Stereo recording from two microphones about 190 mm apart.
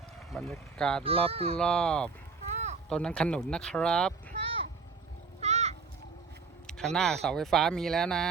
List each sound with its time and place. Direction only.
0.3 s speech: centre (ahead or behind)
1.0 s speech: 30° right (ahead or behind)
1.5 s speech: 5° left (ahead or behind)
2.5 s a sound: 35° right (ahead or behind)
2.9 s speech: 5° left (ahead or behind)
4.3 s a sound: 30° right (ahead or behind)
6.7 s speech: 5° left (ahead or behind)